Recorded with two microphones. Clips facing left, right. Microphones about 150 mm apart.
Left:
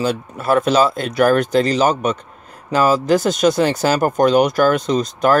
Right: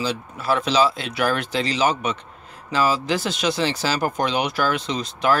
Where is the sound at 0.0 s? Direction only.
50° left (ahead or behind).